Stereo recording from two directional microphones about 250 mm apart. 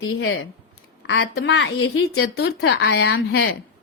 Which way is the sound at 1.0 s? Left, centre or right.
Left.